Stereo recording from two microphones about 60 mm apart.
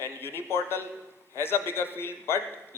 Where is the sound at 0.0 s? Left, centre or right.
Left.